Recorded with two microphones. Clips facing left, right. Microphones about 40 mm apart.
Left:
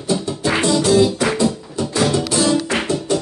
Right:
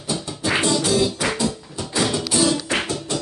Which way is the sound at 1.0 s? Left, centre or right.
Centre.